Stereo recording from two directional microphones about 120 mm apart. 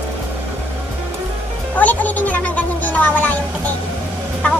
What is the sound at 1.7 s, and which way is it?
Music, 15° left (ahead or behind).